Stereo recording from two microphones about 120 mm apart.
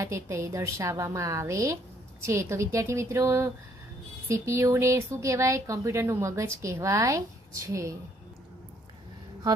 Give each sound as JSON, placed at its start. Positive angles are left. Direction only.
{"t": 0.0, "sound": "speech", "side_deg": -25}